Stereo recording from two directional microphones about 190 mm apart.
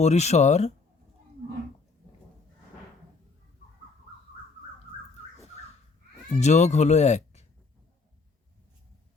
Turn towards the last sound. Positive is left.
turn(degrees=35)  # may be behind; listen again after turning